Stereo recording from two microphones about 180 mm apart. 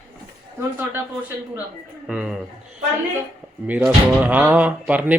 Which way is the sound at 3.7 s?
10° right (ahead or behind).